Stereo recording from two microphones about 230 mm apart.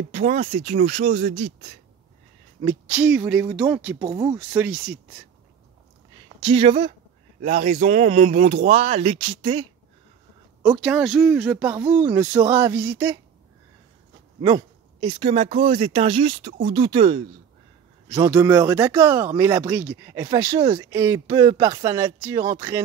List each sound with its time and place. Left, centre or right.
0.1 s speech: right
2.6 s speech: centre
6.2 s speech: right
7.4 s speech: right
10.8 s speech: centre
14.4 s speech: centre
18.1 s speech: centre